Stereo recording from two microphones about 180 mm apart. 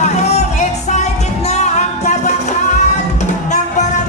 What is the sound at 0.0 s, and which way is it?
Music, 40° left (ahead or behind).